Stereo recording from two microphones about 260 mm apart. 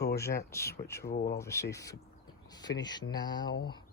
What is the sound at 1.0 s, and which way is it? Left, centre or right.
Speech, left.